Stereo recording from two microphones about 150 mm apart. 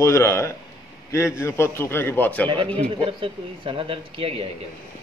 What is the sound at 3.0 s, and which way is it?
A man's voice, 35° right (ahead or behind).